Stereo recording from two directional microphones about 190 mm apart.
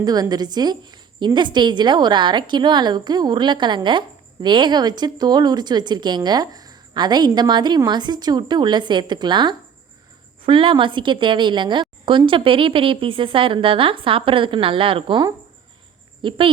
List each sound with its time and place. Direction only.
0.0 s a woman's voice: 20° right (ahead or behind)